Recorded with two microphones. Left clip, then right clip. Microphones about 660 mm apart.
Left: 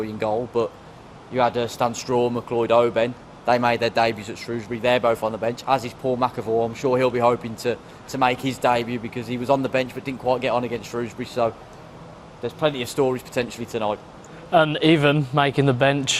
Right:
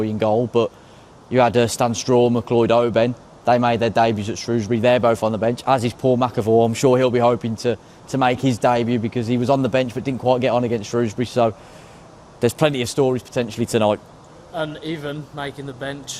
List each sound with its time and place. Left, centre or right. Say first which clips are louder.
0.0 s speech: right 5 dB; right
12.4 s speech: right 5 dB; right
13.0 s speech: right 2 dB; right
14.5 s a man's voice: left 10 dB; left